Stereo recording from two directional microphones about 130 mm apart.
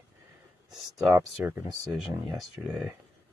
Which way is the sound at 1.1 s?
20° right (ahead or behind).